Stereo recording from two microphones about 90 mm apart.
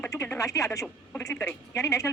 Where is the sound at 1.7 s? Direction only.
35° left (ahead or behind).